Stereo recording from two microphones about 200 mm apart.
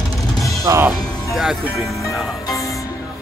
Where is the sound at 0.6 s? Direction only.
15° right (ahead or behind).